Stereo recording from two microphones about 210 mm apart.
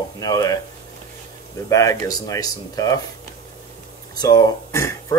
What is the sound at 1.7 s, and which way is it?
Speech, 15° left (ahead or behind).